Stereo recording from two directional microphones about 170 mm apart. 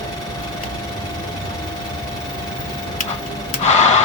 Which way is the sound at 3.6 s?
40° left (ahead or behind).